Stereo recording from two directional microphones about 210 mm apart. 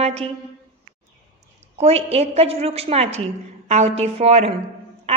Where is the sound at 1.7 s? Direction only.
30° right (ahead or behind).